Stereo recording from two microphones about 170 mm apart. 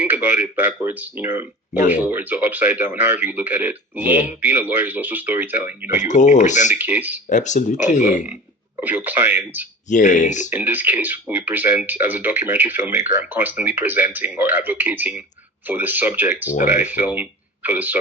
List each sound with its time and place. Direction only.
0.0 s speech: 10° right (ahead or behind)
1.7 s speech: 45° left (ahead or behind)
2.0 s speech: 10° right (ahead or behind)
5.9 s speech: 45° left (ahead or behind)
6.7 s speech: 10° right (ahead or behind)
7.3 s speech: 45° left (ahead or behind)
8.8 s speech: 10° right (ahead or behind)
9.9 s speech: 45° left (ahead or behind)
10.5 s speech: 10° right (ahead or behind)
16.5 s speech: 45° left (ahead or behind)
16.9 s speech: 10° right (ahead or behind)